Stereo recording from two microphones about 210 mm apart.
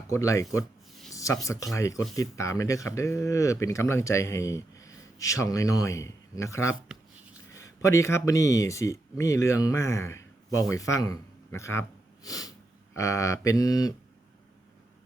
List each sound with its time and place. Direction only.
0.1 s speech: 15° left (ahead or behind)